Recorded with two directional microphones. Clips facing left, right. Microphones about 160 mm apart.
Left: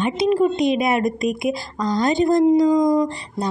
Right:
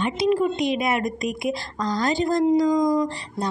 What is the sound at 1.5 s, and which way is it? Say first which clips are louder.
A woman's voice: left 4 dB; 15° left (ahead or behind).